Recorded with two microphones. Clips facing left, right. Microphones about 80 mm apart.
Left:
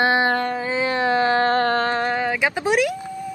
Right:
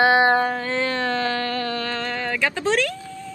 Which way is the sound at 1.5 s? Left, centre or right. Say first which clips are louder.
Left 7 dB; left.